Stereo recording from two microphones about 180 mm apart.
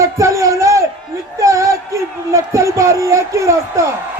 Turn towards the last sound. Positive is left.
turn(degrees=-15)  # may be behind; listen again after turning